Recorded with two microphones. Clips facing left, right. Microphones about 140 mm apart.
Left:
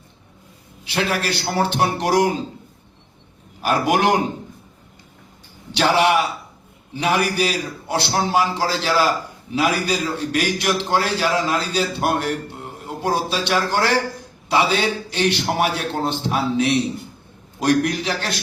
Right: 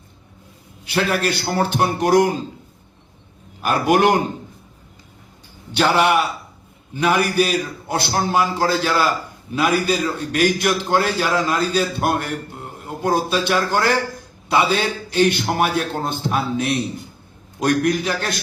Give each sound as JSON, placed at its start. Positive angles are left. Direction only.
{"t": 0.9, "sound": "a man's voice", "side_deg": -50}
{"t": 3.6, "sound": "a man's voice", "side_deg": -55}
{"t": 5.7, "sound": "a man's voice", "side_deg": -50}
{"t": 12.8, "sound": "mantra", "side_deg": -50}
{"t": 13.6, "sound": "a man's voice", "side_deg": -50}